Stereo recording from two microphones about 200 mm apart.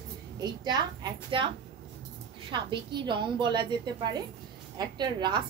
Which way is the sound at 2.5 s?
25° right (ahead or behind).